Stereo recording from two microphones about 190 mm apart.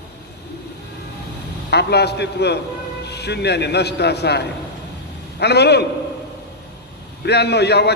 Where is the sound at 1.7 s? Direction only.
60° left (ahead or behind).